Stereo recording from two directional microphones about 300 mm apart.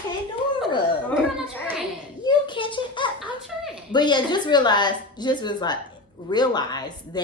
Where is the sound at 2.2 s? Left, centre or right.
Centre.